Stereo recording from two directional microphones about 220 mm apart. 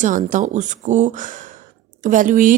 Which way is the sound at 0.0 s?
35° right (ahead or behind).